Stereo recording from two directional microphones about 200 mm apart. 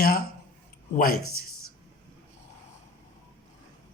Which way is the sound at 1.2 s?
90° left.